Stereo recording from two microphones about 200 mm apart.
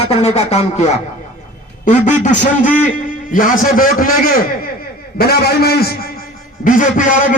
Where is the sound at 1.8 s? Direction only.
40° left (ahead or behind).